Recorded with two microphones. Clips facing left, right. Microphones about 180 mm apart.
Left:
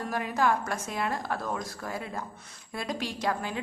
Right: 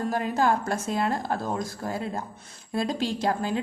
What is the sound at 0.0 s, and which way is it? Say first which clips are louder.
A woman's voice: right 3 dB; 30° right (ahead or behind).